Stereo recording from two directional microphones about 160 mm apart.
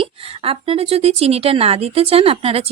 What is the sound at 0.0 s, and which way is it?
A woman's voice, 35° right (ahead or behind).